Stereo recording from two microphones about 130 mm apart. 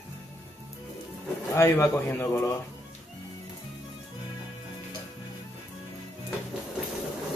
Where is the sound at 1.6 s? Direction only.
20° left (ahead or behind).